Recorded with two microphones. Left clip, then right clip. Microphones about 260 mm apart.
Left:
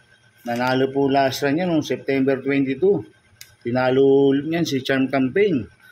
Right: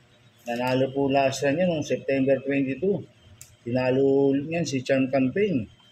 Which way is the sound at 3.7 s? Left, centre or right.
Left.